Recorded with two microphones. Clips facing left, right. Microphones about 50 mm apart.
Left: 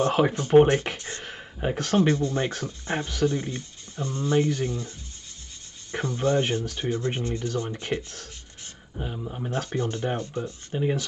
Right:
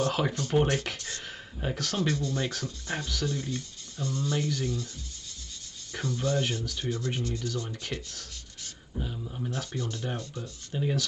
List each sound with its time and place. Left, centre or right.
0.0 s speech: left
5.9 s speech: left